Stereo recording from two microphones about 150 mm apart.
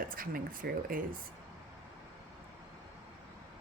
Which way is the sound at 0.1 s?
70° right (ahead or behind).